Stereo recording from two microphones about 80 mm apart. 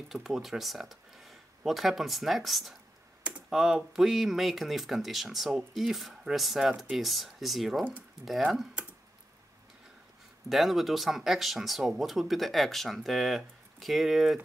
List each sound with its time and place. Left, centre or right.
0.1 s speech: centre
10.5 s speech: centre